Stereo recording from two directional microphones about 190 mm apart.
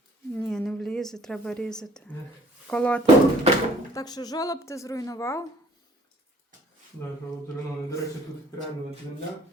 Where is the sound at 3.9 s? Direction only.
20° left (ahead or behind).